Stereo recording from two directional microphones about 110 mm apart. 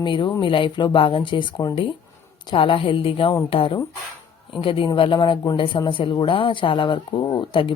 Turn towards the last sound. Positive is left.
turn(degrees=50)  # may be behind; listen again after turning